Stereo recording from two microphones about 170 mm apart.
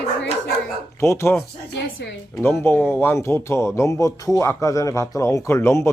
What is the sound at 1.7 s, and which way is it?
Speech, 90° left.